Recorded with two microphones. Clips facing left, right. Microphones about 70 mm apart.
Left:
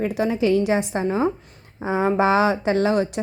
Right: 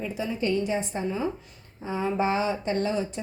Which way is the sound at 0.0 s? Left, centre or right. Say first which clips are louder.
Left 8 dB; left.